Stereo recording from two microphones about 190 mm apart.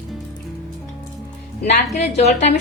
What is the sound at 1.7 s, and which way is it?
Speech, 35° left (ahead or behind).